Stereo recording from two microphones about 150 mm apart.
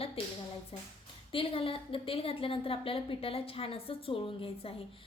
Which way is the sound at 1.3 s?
35° left (ahead or behind).